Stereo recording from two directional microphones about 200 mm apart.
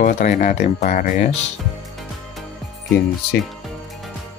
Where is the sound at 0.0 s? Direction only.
40° left (ahead or behind).